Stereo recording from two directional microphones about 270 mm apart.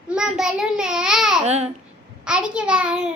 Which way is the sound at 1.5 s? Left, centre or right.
Right.